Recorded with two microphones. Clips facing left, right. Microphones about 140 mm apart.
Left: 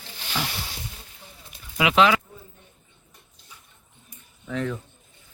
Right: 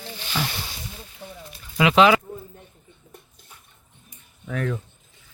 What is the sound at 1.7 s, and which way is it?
Speech, 10° left (ahead or behind).